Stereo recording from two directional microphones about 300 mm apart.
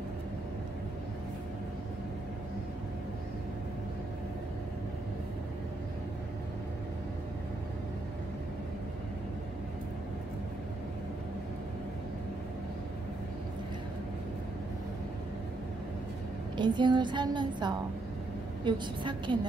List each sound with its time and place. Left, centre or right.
16.5 s a woman's voice: centre